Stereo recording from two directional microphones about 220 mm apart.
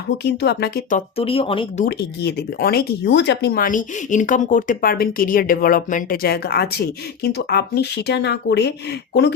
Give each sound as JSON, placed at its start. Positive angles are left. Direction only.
{"t": 0.3, "sound": "speech", "side_deg": 50}
{"t": 1.8, "sound": "speech", "side_deg": 45}